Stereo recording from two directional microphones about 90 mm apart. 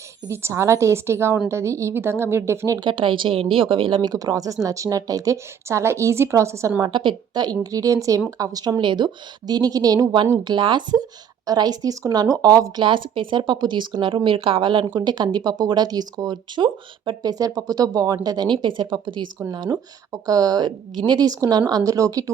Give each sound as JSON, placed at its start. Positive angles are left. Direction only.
{"t": 0.3, "sound": "a woman's voice", "side_deg": -30}
{"t": 2.8, "sound": "a woman's voice", "side_deg": -70}
{"t": 4.1, "sound": "a woman's voice", "side_deg": -45}
{"t": 6.8, "sound": "speech", "side_deg": -60}
{"t": 7.6, "sound": "a woman's voice", "side_deg": -40}
{"t": 8.8, "sound": "speech", "side_deg": -60}
{"t": 11.4, "sound": "speech", "side_deg": -45}
{"t": 12.8, "sound": "speech", "side_deg": -65}
{"t": 14.3, "sound": "a woman's voice", "side_deg": -90}
{"t": 14.9, "sound": "speech", "side_deg": -55}
{"t": 17.2, "sound": "speech", "side_deg": -40}
{"t": 19.5, "sound": "a woman's voice", "side_deg": -50}